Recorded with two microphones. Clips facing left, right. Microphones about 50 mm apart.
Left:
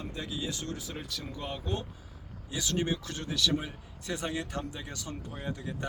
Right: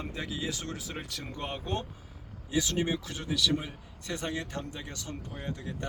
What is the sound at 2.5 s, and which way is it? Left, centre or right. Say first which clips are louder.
Speech: right 2 dB; right.